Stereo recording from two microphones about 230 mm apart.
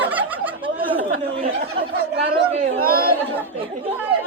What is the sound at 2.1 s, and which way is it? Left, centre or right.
Chatter, right.